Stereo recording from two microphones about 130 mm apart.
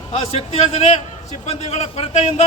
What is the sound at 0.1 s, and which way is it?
A man's voice, 50° left (ahead or behind).